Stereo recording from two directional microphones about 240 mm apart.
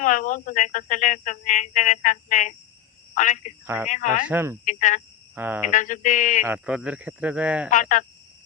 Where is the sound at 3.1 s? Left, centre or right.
Left.